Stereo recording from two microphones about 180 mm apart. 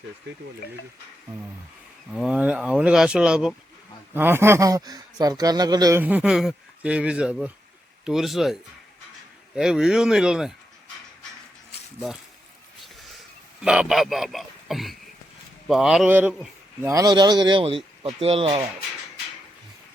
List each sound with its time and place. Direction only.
2.1 s speech: 5° right (ahead or behind); by 6.0 s 20° right (ahead or behind)
6.0 s speech: 10° right (ahead or behind)
9.6 s speech: 5° right (ahead or behind)
13.6 s a man's voice: 5° right (ahead or behind)
16.9 s speech: 20° right (ahead or behind)